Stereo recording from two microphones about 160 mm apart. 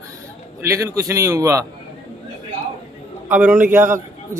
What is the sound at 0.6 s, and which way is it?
A man's voice, 20° right (ahead or behind).